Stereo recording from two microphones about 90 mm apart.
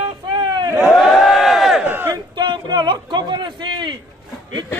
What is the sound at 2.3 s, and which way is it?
Speech, 55° right (ahead or behind).